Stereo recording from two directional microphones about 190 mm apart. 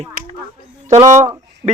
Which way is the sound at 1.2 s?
20° right (ahead or behind).